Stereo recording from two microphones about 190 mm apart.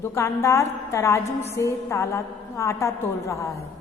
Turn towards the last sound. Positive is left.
turn(degrees=15)  # may be behind; listen again after turning